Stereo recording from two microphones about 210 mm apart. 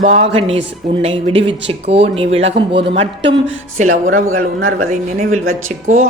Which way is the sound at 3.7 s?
35° right (ahead or behind).